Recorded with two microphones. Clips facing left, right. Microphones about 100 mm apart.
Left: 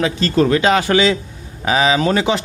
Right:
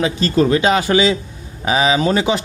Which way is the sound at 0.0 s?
15° right (ahead or behind).